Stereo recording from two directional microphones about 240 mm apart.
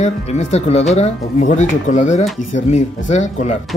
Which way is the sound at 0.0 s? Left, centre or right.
Left.